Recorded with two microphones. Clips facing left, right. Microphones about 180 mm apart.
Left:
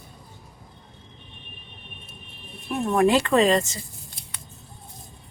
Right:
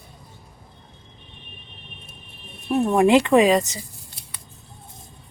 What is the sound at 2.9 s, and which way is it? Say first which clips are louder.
Speech: right 3 dB; 15° right (ahead or behind).